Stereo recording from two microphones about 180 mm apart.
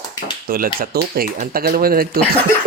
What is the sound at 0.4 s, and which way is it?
Speech, 55° right (ahead or behind).